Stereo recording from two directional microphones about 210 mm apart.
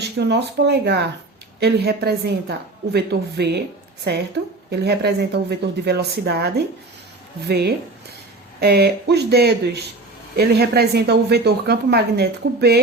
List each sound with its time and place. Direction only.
0.0 s speech: 55° right (ahead or behind)
4.7 s speech: 50° right (ahead or behind)